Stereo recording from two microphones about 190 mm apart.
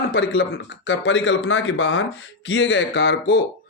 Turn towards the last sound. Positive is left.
turn(degrees=70)  # may be behind; listen again after turning